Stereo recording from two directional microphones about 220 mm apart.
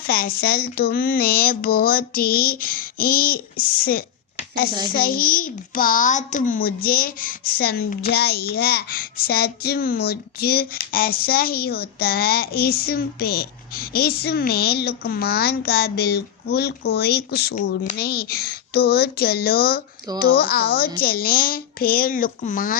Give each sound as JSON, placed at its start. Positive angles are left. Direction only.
{"t": 0.1, "sound": "a child's voice", "side_deg": 45}